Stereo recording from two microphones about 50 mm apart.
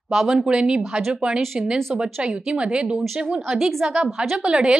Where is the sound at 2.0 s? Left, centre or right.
Centre.